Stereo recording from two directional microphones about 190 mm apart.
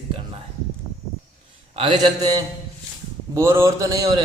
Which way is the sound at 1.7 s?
30° right (ahead or behind).